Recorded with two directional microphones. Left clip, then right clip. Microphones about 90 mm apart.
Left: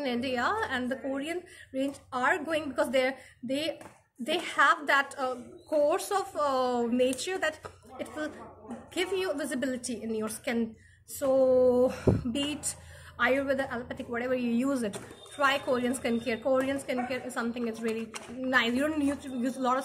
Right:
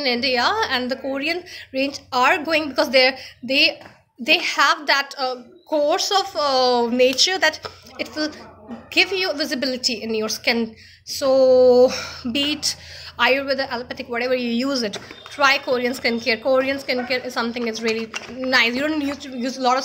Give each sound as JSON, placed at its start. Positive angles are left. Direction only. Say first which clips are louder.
{"t": 0.0, "sound": "a woman's voice", "louder": "right 11 dB", "side_deg": -20}
{"t": 12.3, "sound": "a woman's voice", "louder": "right 11 dB", "side_deg": -25}